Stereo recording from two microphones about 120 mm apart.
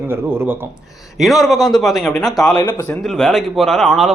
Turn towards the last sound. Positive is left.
turn(degrees=0)  # may be behind; listen again after turning